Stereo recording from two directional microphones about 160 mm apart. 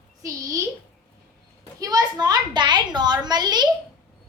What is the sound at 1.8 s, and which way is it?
A child's voice, 25° right (ahead or behind).